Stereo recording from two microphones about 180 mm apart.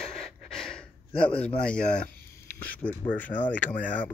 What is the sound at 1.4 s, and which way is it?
Speech, 5° left (ahead or behind).